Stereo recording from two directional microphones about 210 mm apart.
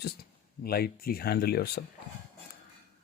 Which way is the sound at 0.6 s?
45° left (ahead or behind).